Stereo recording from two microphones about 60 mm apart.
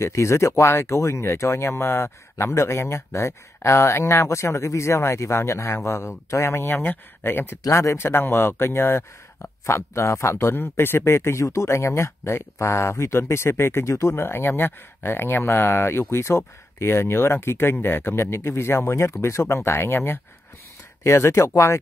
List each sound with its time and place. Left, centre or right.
0.0 s speech: left
6.7 s speech: left
7.7 s speech: left
8.1 s speech: left
11.4 s speech: left
21.0 s speech: left